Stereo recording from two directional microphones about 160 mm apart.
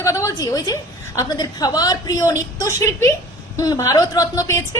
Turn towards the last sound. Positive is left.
turn(degrees=20)  # may be behind; listen again after turning